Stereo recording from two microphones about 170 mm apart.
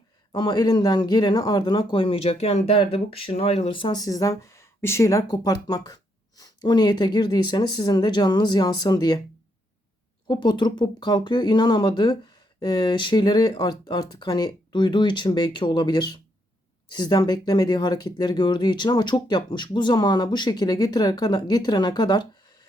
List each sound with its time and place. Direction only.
0.3 s a man's voice: 25° left (ahead or behind)
10.2 s a man's voice: 25° left (ahead or behind)